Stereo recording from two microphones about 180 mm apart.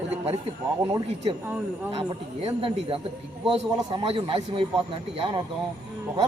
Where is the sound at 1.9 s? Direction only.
35° right (ahead or behind).